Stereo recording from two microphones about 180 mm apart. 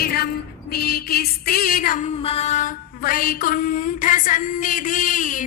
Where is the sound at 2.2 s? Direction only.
35° left (ahead or behind).